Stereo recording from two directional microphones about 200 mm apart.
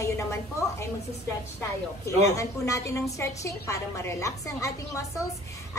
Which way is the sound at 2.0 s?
15° left (ahead or behind).